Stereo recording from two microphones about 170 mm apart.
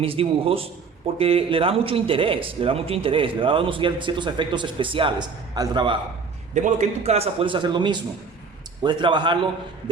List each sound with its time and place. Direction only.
0.0 s a man's voice: 35° right (ahead or behind)
6.5 s a man's voice: 45° right (ahead or behind); by 9.5 s 30° right (ahead or behind)